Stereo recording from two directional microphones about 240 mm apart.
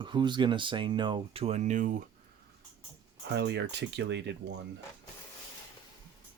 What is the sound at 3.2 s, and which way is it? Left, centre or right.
Speech, right.